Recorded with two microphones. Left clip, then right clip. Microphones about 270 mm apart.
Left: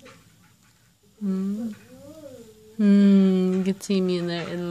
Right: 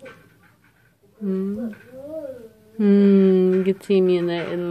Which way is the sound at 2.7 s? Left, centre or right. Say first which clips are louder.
Right 4 dB; left.